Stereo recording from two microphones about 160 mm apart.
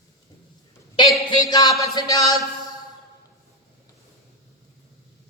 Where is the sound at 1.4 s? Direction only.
25° left (ahead or behind).